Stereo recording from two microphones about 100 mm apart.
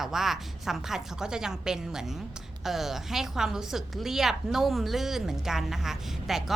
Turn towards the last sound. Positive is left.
turn(degrees=-5)  # may be behind; listen again after turning